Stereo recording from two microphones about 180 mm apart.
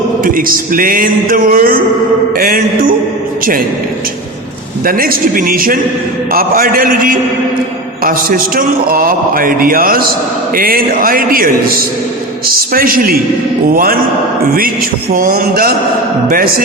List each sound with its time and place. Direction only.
0.3 s a man's voice: 50° right (ahead or behind)
4.9 s a man's voice: 55° right (ahead or behind)
15.1 s a man's voice: 50° right (ahead or behind)